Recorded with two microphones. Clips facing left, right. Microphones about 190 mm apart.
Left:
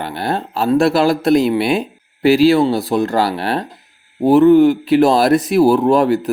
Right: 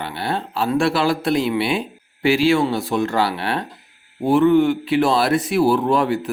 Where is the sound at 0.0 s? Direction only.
45° left (ahead or behind).